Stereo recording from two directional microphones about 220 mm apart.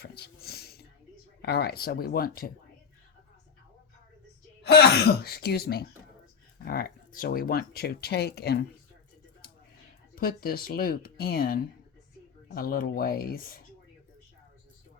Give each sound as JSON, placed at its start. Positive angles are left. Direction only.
{"t": 0.0, "sound": "a sound", "side_deg": 45}
{"t": 1.4, "sound": "speech", "side_deg": 45}
{"t": 4.6, "sound": "speech", "side_deg": 50}
{"t": 10.2, "sound": "speech", "side_deg": 40}